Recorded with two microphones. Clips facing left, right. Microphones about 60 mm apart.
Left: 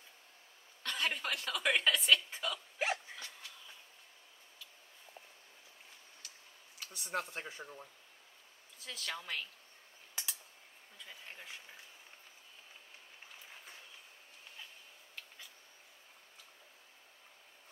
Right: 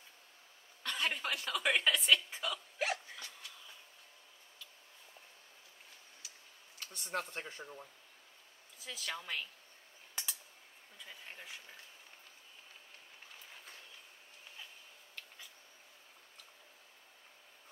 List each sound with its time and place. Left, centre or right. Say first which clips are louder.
0.8 s speech: even; centre
2.8 s hiccup: left 1 dB; left
6.2 s tick-tock: even; centre
6.8 s speech: left 1 dB; centre
10.2 s a sound: even; centre
11.0 s speech: even; centre
13.5 s train: even; centre
15.1 s a sound: even; centre